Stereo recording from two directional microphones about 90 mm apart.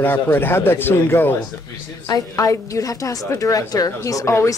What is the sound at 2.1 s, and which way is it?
A woman's voice, 35° left (ahead or behind).